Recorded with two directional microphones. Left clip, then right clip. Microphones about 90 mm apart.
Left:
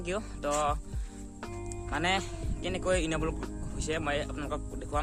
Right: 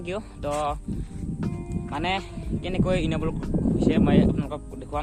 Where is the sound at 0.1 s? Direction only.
35° left (ahead or behind).